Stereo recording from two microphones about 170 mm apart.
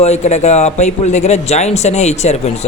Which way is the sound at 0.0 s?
40° left (ahead or behind).